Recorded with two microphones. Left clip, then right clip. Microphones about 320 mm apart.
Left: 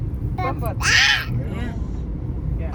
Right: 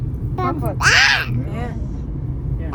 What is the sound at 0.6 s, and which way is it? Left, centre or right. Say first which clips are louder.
Crow: right 3 dB; centre.